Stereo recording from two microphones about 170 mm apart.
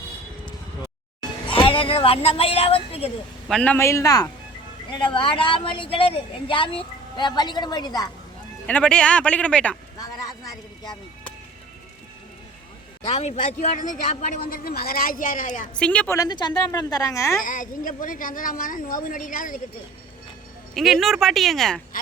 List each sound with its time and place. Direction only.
1.5 s a woman's voice: 30° left (ahead or behind)
3.5 s speech: 10° left (ahead or behind); by 8.1 s 25° left (ahead or behind)
8.6 s speech: 5° left (ahead or behind)
10.0 s a sound: 20° left (ahead or behind)
13.1 s a man's voice: 40° left (ahead or behind)
15.8 s speech: 10° left (ahead or behind)
16.1 s speech: 20° left (ahead or behind)
17.4 s a man's voice: 50° left (ahead or behind)
20.7 s speech: centre (ahead or behind)